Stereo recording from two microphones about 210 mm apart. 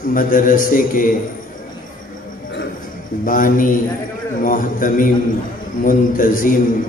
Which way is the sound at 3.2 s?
40° left (ahead or behind).